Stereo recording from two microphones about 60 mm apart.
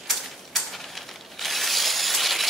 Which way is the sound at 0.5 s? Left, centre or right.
Centre.